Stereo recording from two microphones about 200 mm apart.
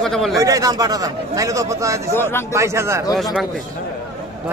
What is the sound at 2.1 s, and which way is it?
Speech, 10° left (ahead or behind).